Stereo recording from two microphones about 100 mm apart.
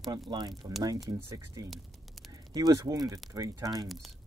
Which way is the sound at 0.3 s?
50° right (ahead or behind).